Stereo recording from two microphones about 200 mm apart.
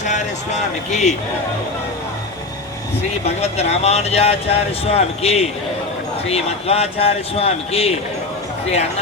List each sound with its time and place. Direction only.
0.0 s a man's voice: 35° left (ahead or behind)
3.2 s a man's voice: 35° left (ahead or behind)